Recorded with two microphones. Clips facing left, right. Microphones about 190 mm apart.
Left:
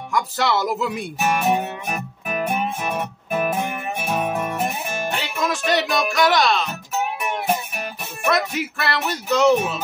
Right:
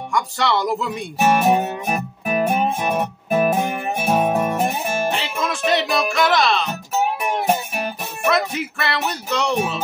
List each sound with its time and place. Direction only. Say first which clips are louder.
0.1 s speech: even; 5° left (ahead or behind)
1.2 s music: right 4 dB; 40° right (ahead or behind)
5.1 s music: even; centre (ahead or behind)
7.2 s music: right 3 dB; 40° right (ahead or behind)
8.3 s music: right 1 dB; centre (ahead or behind)